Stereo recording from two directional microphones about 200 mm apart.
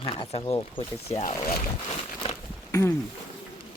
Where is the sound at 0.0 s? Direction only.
25° left (ahead or behind).